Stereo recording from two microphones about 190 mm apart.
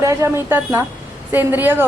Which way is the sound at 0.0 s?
15° right (ahead or behind).